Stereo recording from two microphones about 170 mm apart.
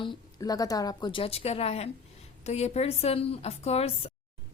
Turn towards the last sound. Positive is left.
turn(degrees=35)  # may be behind; listen again after turning